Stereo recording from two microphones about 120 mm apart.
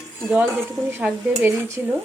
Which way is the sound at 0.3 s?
15° right (ahead or behind).